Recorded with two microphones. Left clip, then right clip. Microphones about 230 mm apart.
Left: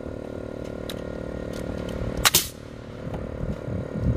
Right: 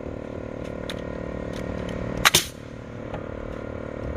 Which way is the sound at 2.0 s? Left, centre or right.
Left.